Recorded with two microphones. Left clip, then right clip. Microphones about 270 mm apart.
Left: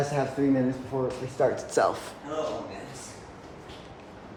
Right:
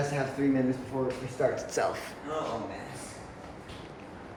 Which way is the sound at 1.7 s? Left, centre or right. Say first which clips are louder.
Left 5 dB; centre.